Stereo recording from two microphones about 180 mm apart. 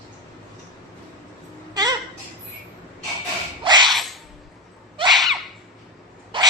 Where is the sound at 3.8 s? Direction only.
Centre (ahead or behind).